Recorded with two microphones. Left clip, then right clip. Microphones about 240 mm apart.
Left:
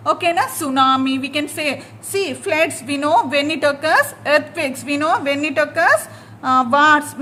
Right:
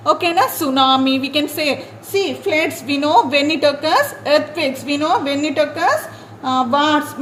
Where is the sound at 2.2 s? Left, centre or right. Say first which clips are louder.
Left 1 dB; left.